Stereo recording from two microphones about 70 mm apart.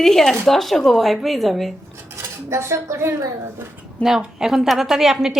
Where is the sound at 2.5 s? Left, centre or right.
Right.